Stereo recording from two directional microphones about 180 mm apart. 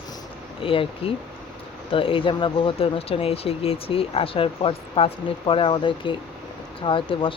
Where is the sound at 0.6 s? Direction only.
30° left (ahead or behind).